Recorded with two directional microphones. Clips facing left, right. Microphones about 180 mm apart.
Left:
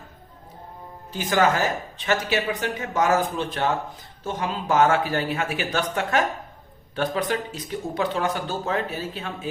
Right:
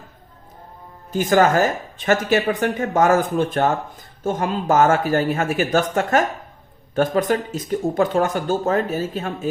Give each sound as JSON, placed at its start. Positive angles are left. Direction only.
{"t": 1.1, "sound": "speech", "side_deg": -45}